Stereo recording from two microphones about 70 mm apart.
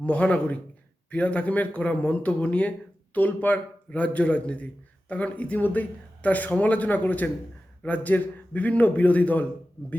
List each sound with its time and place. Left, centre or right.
0.0 s a man's voice: centre